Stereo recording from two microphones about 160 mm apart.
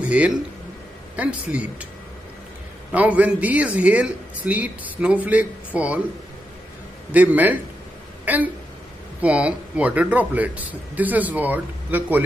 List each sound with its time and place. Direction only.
0.0 s a man's voice: 10° right (ahead or behind)
2.9 s speech: 10° right (ahead or behind)
7.1 s speech: 10° right (ahead or behind)